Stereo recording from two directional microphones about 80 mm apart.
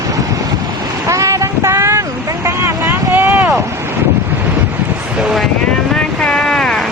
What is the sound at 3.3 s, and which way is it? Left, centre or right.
Boat, right.